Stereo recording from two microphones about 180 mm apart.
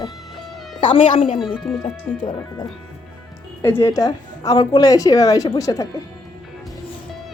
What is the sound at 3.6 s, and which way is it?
Speech, 15° left (ahead or behind).